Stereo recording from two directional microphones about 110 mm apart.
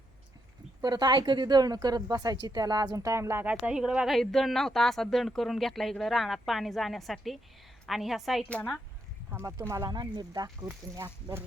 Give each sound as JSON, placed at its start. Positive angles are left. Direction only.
{"t": 0.8, "sound": "a woman's voice", "side_deg": -40}
{"t": 3.6, "sound": "speech", "side_deg": -5}
{"t": 8.4, "sound": "speech", "side_deg": 10}
{"t": 9.3, "sound": "a woman's voice", "side_deg": -25}
{"t": 10.9, "sound": "speech", "side_deg": -25}